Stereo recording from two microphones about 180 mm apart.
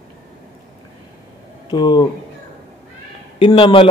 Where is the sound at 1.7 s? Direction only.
25° left (ahead or behind).